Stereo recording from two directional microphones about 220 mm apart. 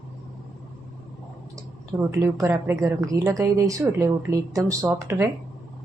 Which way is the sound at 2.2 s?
15° right (ahead or behind).